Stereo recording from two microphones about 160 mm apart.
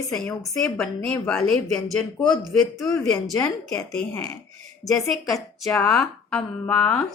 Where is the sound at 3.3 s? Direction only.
20° left (ahead or behind).